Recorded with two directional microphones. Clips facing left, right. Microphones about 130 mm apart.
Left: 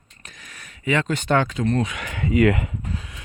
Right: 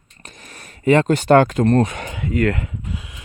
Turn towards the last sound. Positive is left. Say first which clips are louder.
# right 1 dB
turn(degrees=-15)  # may be behind; listen again after turning